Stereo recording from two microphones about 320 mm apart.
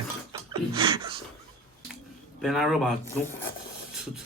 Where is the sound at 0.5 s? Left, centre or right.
Centre.